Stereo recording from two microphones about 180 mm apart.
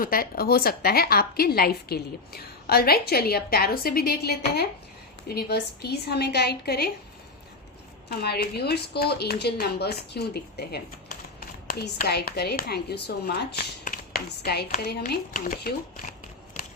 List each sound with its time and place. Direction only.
0.0 s a woman's voice: 55° left (ahead or behind)
8.2 s a woman's voice: 60° left (ahead or behind)